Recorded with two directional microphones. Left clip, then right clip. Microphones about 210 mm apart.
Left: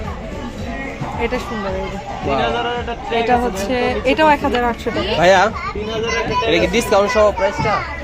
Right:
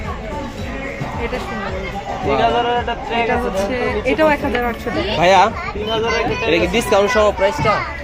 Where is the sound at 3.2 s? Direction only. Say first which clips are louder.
Left 2 dB; 40° left (ahead or behind).